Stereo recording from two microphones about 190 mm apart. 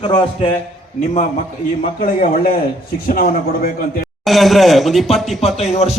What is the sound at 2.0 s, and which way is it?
A man's voice, 50° left (ahead or behind).